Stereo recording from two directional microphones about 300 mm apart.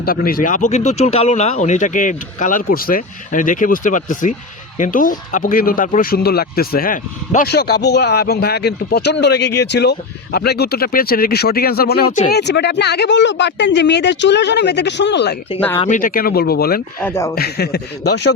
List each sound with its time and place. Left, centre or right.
0.0 s speech: left
17.0 s speech: centre
17.3 s speech: left